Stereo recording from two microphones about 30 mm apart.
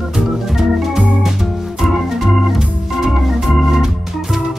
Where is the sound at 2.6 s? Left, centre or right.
Centre.